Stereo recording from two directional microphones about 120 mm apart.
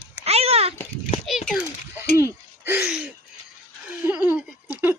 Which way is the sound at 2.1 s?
25° right (ahead or behind).